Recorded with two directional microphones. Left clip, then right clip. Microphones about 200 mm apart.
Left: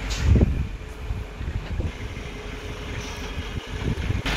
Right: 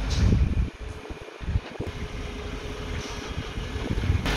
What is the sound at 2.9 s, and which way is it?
Vehicle, 50° right (ahead or behind).